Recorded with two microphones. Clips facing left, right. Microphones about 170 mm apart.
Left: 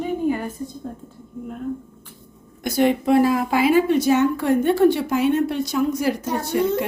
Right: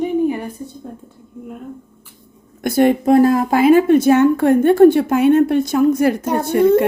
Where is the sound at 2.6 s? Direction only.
50° right (ahead or behind).